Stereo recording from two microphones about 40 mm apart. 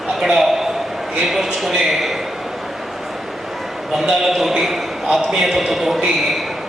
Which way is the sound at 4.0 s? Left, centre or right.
Centre.